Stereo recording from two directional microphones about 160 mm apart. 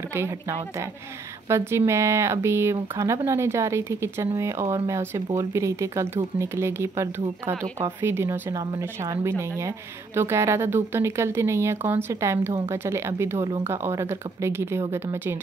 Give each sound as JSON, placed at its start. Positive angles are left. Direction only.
{"t": 0.1, "sound": "speech", "side_deg": -15}